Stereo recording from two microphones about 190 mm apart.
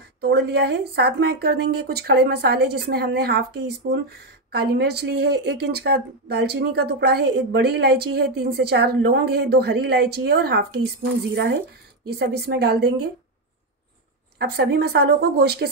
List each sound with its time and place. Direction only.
0.2 s speech: 60° right (ahead or behind)
12.1 s speech: 55° right (ahead or behind)
14.4 s speech: 60° right (ahead or behind)